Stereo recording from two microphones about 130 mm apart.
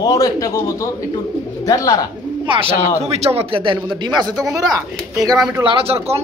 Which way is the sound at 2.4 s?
40° right (ahead or behind).